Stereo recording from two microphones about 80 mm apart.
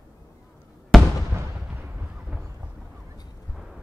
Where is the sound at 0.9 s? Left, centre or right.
Centre.